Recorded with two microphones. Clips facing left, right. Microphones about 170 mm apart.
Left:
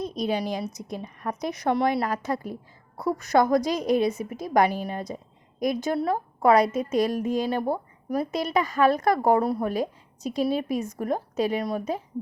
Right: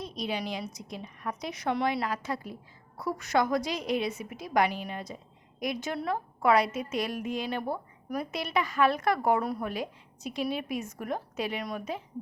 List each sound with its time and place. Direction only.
0.0 s a woman's voice: 45° left (ahead or behind)